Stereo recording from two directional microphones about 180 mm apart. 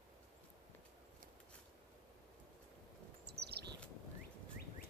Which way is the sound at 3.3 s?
65° right (ahead or behind).